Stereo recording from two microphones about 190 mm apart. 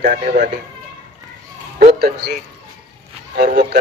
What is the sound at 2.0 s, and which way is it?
Speech, 60° right (ahead or behind).